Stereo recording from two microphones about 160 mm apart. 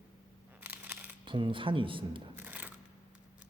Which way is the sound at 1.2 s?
30° right (ahead or behind).